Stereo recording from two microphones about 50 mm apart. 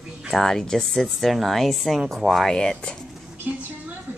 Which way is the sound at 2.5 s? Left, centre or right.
Centre.